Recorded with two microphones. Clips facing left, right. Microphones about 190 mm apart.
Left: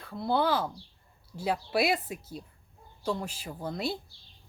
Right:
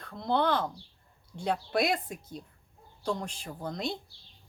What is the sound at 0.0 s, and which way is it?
A woman's voice, 5° left (ahead or behind).